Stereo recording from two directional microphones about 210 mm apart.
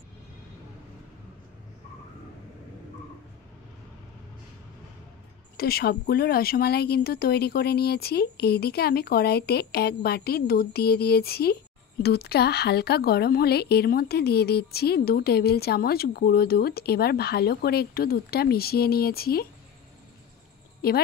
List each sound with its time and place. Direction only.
5.6 s a woman's voice: 45° left (ahead or behind)
20.8 s a woman's voice: 45° left (ahead or behind)